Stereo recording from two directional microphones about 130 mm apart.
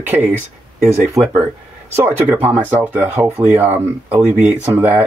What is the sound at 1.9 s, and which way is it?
Speech, 15° right (ahead or behind).